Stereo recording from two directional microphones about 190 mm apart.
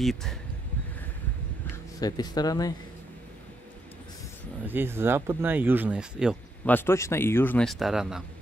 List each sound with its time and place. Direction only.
0.0 s speech: centre (ahead or behind)
1.7 s speech: 20° left (ahead or behind)
4.6 s speech: 10° right (ahead or behind)
6.6 s a man's voice: 10° left (ahead or behind)